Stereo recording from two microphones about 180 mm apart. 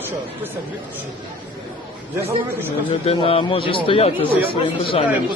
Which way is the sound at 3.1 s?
30° left (ahead or behind).